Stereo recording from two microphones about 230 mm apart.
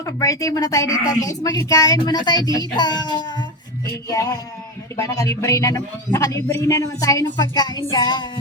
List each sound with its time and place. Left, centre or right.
0.0 s speech: centre
4.9 s speech: centre